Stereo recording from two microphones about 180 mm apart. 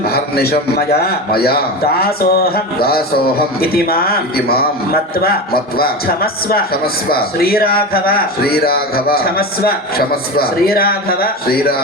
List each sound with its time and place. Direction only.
0.1 s a man's voice: 60° left (ahead or behind)
6.5 s a man's voice: 55° left (ahead or behind)